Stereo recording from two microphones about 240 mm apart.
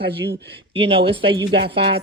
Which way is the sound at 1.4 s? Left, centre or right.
Right.